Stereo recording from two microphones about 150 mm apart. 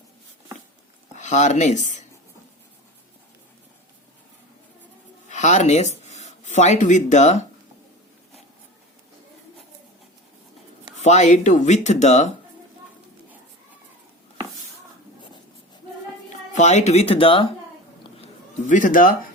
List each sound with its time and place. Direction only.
1.1 s speech: 50° left (ahead or behind)
5.3 s speech: 50° left (ahead or behind)
10.9 s speech: 50° left (ahead or behind)
16.5 s speech: 50° left (ahead or behind); by 17.5 s 35° left (ahead or behind)
18.2 s a sound: 55° left (ahead or behind)